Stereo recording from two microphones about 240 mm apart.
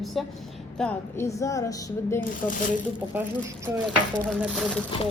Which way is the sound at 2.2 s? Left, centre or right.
Left.